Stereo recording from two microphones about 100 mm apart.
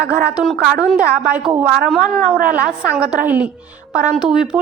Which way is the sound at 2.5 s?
10° right (ahead or behind).